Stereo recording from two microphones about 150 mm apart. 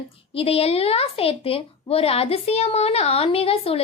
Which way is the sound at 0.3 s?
40° left (ahead or behind).